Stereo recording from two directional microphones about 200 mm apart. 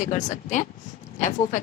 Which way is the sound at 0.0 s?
35° left (ahead or behind).